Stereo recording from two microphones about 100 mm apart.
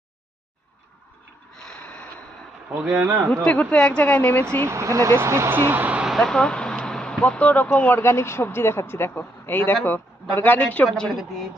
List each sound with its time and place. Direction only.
1.5 s snort: 5° left (ahead or behind)
2.6 s speech: 5° right (ahead or behind)
3.4 s a woman's voice: 15° left (ahead or behind)
4.6 s speech: 30° right (ahead or behind)
6.1 s a woman's voice: 5° left (ahead or behind)
10.8 s speech: 5° left (ahead or behind)